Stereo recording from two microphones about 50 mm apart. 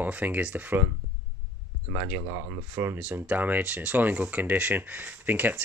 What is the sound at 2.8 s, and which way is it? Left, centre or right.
Speech, right.